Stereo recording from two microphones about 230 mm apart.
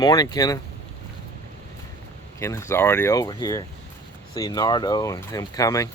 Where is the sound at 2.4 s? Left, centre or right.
Centre.